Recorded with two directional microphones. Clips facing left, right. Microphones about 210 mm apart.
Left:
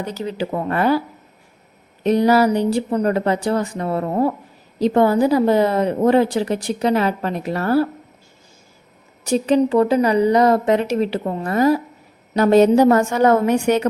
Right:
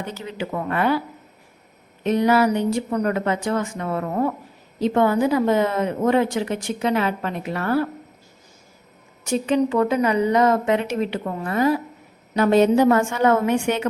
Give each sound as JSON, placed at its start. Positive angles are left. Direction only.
{"t": 0.0, "sound": "speech", "side_deg": 40}
{"t": 2.0, "sound": "speech", "side_deg": 35}
{"t": 9.2, "sound": "speech", "side_deg": 35}